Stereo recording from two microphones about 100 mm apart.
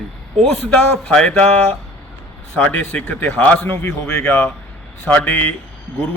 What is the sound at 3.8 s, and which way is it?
Speech, 30° left (ahead or behind).